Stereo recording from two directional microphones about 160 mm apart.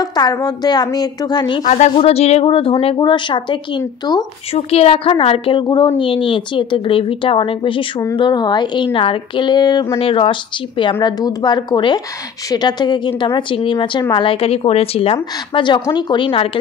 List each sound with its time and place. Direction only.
0.0 s a woman's voice: 25° left (ahead or behind)
1.6 s a woman's voice: 45° left (ahead or behind); by 3.5 s 30° left (ahead or behind)
4.6 s a woman's voice: 40° left (ahead or behind)